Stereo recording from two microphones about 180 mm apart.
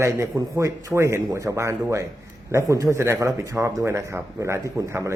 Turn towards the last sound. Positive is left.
turn(degrees=-15)  # may be behind; listen again after turning